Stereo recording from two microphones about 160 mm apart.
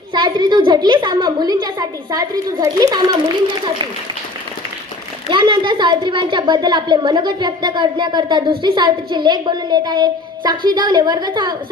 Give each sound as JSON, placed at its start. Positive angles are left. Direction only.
{"t": 0.1, "sound": "a woman's voice", "side_deg": -30}
{"t": 5.3, "sound": "a woman's voice", "side_deg": -30}